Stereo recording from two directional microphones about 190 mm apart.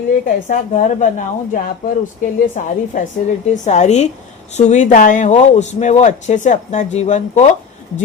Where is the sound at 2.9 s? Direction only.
45° left (ahead or behind).